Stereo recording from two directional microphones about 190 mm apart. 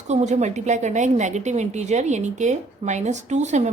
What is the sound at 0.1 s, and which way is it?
A woman's voice, 35° right (ahead or behind).